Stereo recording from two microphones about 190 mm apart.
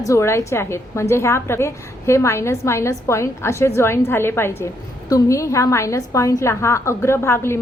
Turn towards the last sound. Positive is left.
turn(degrees=15)  # may be behind; listen again after turning